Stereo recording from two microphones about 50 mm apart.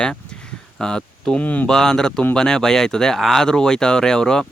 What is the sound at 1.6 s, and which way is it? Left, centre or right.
Speech, centre.